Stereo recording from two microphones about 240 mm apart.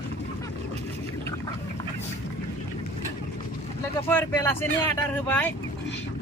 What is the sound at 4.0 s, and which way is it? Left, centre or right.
Speech, centre.